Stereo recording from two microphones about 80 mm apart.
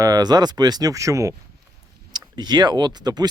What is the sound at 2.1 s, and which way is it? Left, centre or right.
Speech, right.